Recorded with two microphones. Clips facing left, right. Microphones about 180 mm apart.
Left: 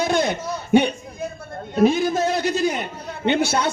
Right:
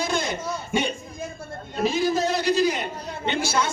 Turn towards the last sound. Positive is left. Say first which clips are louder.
# left 5 dB
turn(degrees=60)  # may be behind; listen again after turning